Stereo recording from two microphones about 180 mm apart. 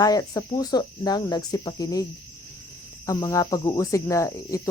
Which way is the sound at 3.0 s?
20° left (ahead or behind).